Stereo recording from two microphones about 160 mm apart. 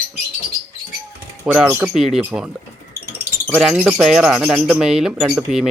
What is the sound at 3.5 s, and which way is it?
Speech, 5° right (ahead or behind).